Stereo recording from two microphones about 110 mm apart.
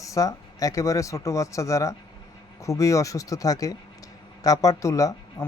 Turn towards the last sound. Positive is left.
turn(degrees=30)  # may be behind; listen again after turning